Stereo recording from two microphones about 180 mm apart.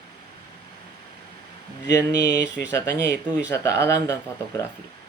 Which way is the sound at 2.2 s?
70° left (ahead or behind).